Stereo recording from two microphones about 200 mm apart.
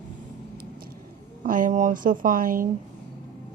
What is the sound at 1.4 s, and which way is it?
A woman's voice, 40° right (ahead or behind).